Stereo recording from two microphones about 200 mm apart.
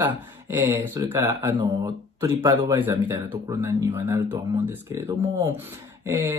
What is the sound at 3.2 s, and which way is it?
Speech, 25° right (ahead or behind).